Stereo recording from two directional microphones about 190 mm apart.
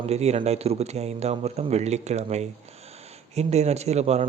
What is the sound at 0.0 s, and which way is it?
Speech, 35° right (ahead or behind).